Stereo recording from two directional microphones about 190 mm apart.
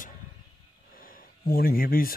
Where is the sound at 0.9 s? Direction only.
50° left (ahead or behind).